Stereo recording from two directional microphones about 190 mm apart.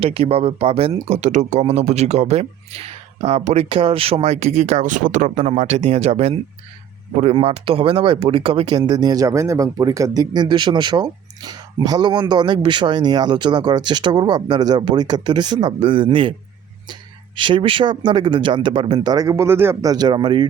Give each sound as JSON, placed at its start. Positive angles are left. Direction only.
{"t": 0.0, "sound": "speech", "side_deg": -30}
{"t": 17.3, "sound": "speech", "side_deg": -25}